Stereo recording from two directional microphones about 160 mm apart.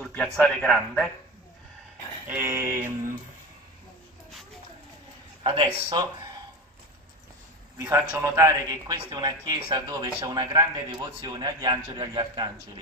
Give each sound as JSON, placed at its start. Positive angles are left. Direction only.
{"t": 0.1, "sound": "a man's voice", "side_deg": 5}
{"t": 2.2, "sound": "a sound", "side_deg": -15}
{"t": 5.4, "sound": "speech", "side_deg": -30}
{"t": 7.7, "sound": "a man's voice", "side_deg": -15}